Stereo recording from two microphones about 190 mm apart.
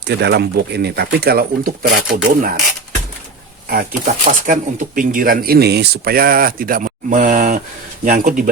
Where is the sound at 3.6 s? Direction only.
50° right (ahead or behind).